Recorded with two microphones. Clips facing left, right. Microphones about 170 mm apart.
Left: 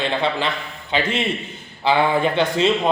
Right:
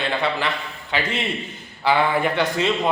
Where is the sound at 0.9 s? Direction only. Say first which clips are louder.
Left 3 dB; 20° left (ahead or behind).